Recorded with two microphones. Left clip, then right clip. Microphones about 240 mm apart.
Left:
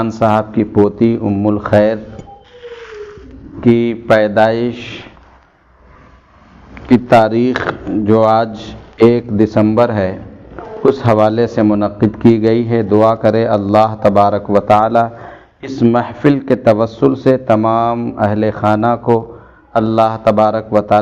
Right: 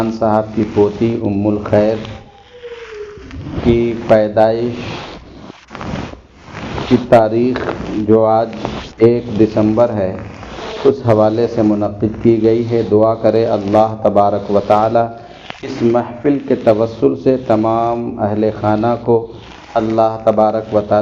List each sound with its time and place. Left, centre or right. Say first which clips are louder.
0.0 s a man's voice: left 1 dB; left
2.6 s a sound: right 1 dB; centre
3.7 s a man's voice: left 1 dB; left
7.1 s a man's voice: even; left